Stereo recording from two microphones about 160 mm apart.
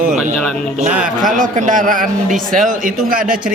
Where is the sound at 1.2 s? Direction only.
55° right (ahead or behind).